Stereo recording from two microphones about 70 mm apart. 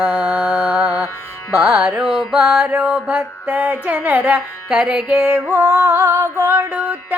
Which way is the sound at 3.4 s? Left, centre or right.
Right.